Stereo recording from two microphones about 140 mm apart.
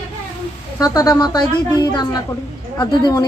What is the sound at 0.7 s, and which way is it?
A woman's voice, 25° left (ahead or behind).